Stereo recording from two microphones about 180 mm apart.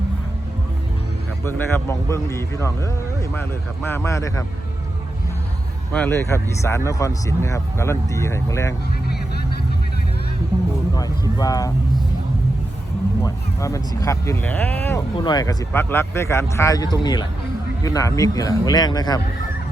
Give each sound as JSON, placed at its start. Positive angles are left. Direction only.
{"t": 1.5, "sound": "speech", "side_deg": 15}
{"t": 5.9, "sound": "speech", "side_deg": 10}
{"t": 10.9, "sound": "speech", "side_deg": 20}
{"t": 13.2, "sound": "speech", "side_deg": 20}
{"t": 15.2, "sound": "speech", "side_deg": 20}